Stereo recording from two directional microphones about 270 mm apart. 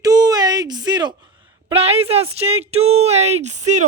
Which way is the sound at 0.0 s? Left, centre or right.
Centre.